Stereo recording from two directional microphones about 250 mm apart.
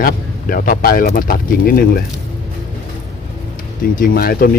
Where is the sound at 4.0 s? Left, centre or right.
Left.